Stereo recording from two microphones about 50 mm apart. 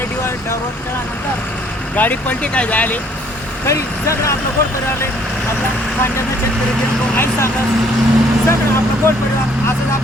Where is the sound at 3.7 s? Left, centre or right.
Left.